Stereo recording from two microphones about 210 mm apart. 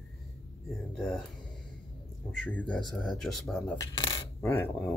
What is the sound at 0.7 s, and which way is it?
Speech, centre (ahead or behind).